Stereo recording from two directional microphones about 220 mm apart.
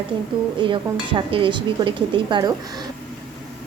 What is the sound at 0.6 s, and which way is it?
Speech, 20° right (ahead or behind).